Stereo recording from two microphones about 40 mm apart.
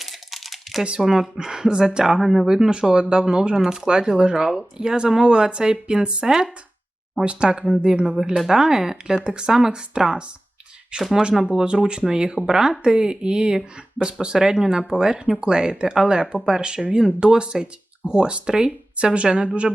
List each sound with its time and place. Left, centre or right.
0.0 s crumpling: centre
1.0 s speech: centre
9.2 s speech: right